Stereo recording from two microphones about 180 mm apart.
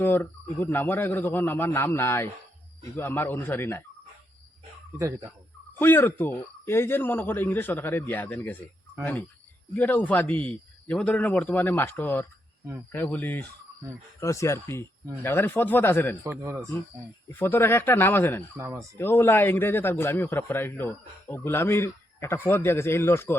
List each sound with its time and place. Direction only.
0.0 s a man's voice: 10° left (ahead or behind)
4.9 s speech: 15° right (ahead or behind)
5.8 s a man's voice: 10° left (ahead or behind)
9.7 s a man's voice: 10° left (ahead or behind)
16.2 s speech: 15° right (ahead or behind)
17.3 s a man's voice: 10° left (ahead or behind)
18.5 s speech: 15° right (ahead or behind)
18.9 s a man's voice: 15° left (ahead or behind)